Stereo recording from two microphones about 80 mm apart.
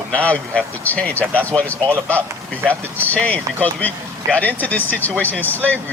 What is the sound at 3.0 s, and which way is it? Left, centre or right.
Speech, centre.